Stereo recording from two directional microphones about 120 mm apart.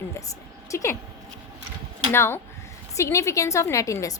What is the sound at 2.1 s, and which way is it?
A woman's voice, 20° left (ahead or behind).